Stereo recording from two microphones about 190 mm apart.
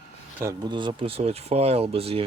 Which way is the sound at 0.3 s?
20° right (ahead or behind).